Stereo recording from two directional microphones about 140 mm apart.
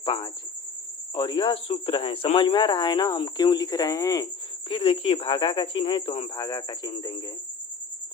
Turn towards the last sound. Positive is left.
turn(degrees=35)  # may be behind; listen again after turning